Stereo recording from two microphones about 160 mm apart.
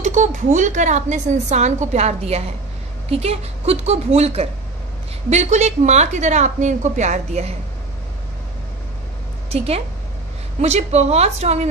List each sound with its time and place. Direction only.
0.0 s a woman's voice: 50° right (ahead or behind)
9.5 s a woman's voice: 40° right (ahead or behind)